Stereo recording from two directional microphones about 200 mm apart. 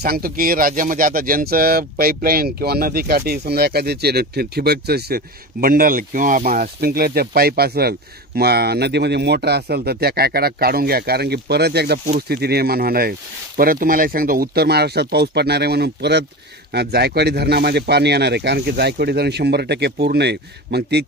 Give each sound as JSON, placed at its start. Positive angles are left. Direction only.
{"t": 0.0, "sound": "speech", "side_deg": -50}